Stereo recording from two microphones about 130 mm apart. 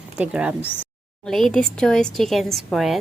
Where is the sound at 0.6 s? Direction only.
15° left (ahead or behind).